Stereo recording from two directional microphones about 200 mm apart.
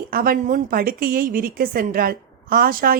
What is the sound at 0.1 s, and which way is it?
Speech, 45° right (ahead or behind).